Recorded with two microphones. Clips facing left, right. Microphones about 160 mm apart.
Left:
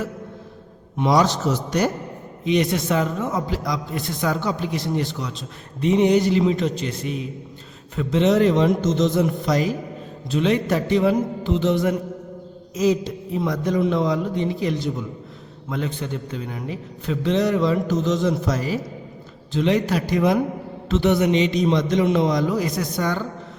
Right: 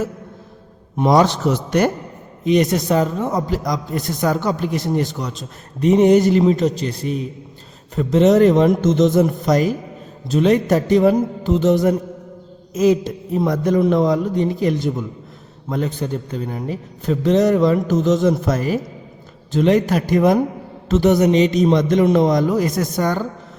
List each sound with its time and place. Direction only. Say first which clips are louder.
0.9 s a man's voice: right 4 dB; 50° right (ahead or behind)
2.4 s a man's voice: right 4 dB; 45° right (ahead or behind)
12.7 s a man's voice: right 4 dB; 55° right (ahead or behind)